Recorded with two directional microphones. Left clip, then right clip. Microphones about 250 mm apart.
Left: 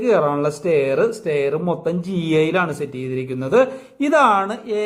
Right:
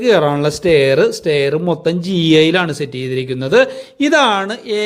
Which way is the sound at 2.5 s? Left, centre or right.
Right.